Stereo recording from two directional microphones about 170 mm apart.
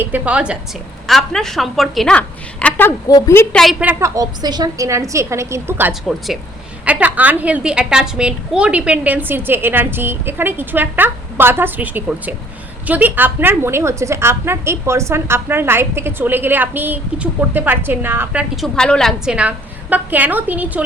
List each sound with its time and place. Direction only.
0.0 s a woman's voice: 10° right (ahead or behind); by 3.4 s 20° left (ahead or behind)
3.5 s a woman's voice: centre (ahead or behind)
4.1 s a woman's voice: 20° right (ahead or behind)
5.9 s a woman's voice: centre (ahead or behind)
18.5 s a woman's voice: centre (ahead or behind)